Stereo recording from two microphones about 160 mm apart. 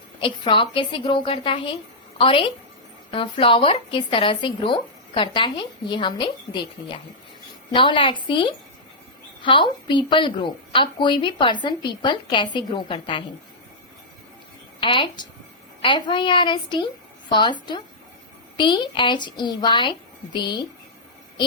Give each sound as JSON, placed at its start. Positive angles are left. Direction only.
{"t": 0.2, "sound": "a woman's voice", "side_deg": 30}
{"t": 14.8, "sound": "a woman's voice", "side_deg": 30}